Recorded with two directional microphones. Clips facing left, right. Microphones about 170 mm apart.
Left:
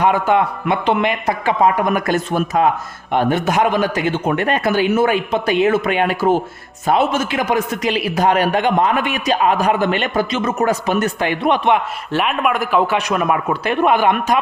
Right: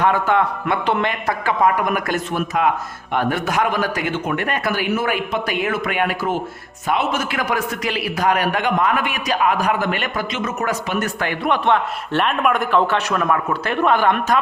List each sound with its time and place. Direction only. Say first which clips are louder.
0.0 s a man's voice: left 2 dB; 15° left (ahead or behind); by 10.9 s 35° left (ahead or behind)
11.0 s a man's voice: left 4 dB; 20° left (ahead or behind)
12.1 s speech: left 1 dB; 5° left (ahead or behind)